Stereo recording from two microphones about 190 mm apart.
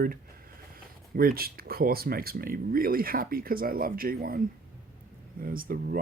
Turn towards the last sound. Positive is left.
turn(degrees=-50)  # may be behind; listen again after turning